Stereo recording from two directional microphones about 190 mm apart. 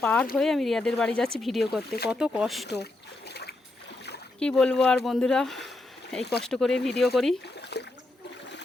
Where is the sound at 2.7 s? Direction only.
60° left (ahead or behind).